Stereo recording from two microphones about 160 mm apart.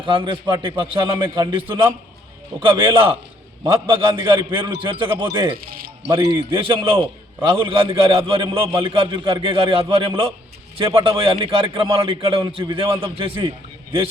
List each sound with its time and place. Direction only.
0.0 s a man's voice: 35° right (ahead or behind)
5.5 s music: 65° right (ahead or behind)
6.1 s a man's voice: 35° right (ahead or behind)